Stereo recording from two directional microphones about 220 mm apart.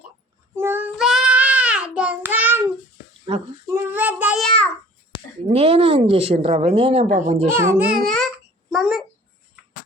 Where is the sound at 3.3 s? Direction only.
25° right (ahead or behind).